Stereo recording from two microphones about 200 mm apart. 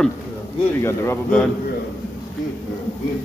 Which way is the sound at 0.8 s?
10° left (ahead or behind).